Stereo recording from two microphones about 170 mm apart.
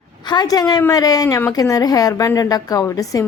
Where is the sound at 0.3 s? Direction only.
25° left (ahead or behind).